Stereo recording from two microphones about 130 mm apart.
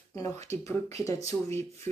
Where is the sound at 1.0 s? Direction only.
25° left (ahead or behind).